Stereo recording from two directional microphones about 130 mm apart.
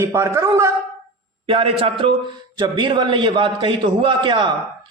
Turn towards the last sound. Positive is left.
turn(degrees=-40)  # may be behind; listen again after turning